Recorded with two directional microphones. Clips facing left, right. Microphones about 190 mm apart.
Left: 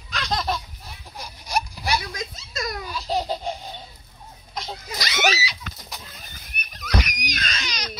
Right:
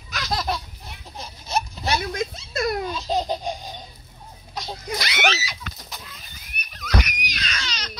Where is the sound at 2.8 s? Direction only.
20° right (ahead or behind).